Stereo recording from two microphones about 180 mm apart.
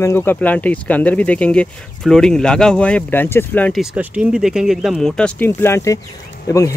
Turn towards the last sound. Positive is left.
turn(degrees=15)  # may be behind; listen again after turning